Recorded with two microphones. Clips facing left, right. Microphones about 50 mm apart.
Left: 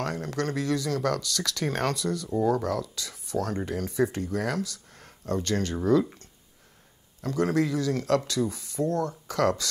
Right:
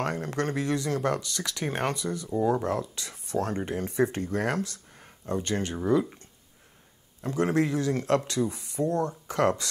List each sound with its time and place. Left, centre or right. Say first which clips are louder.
0.0 s speech: right 1 dB; right; by 2.3 s centre
2.4 s speech: even; right
4.9 s a sound: left 1 dB; centre
5.9 s speech: left 2 dB; centre